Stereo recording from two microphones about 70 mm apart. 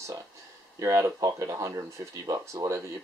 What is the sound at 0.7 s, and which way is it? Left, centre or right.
Speech, right.